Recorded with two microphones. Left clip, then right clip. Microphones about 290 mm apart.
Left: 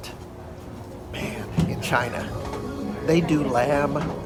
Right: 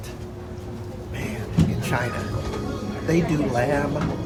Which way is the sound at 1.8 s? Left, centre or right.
Centre.